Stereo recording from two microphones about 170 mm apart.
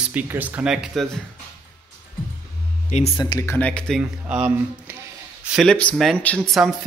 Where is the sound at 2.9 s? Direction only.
40° left (ahead or behind).